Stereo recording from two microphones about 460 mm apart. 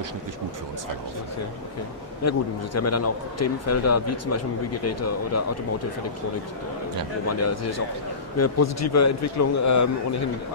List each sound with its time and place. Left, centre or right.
2.2 s a man's voice: left
7.2 s a man's voice: left